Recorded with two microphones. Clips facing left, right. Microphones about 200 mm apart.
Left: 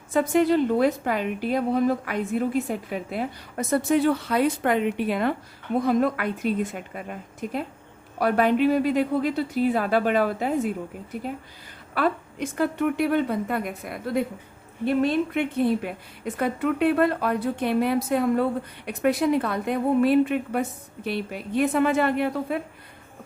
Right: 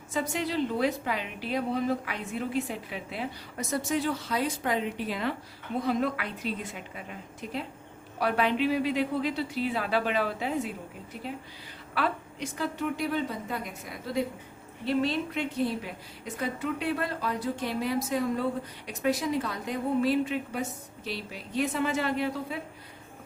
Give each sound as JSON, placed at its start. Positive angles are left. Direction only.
{"t": 0.1, "sound": "a woman's voice", "side_deg": 55}